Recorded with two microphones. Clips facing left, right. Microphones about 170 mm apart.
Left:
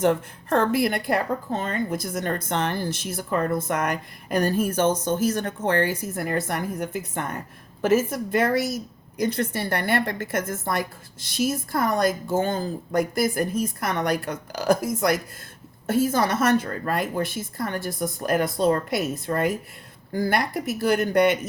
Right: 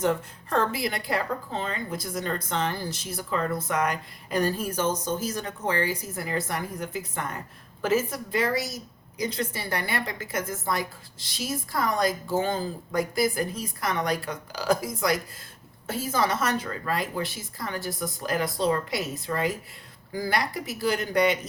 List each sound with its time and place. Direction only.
0.0 s a woman's voice: 55° left (ahead or behind)
5.2 s a woman's voice: 65° left (ahead or behind)
15.9 s a woman's voice: 55° left (ahead or behind)